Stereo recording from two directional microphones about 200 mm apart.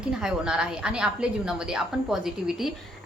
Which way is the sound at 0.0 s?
5° right (ahead or behind).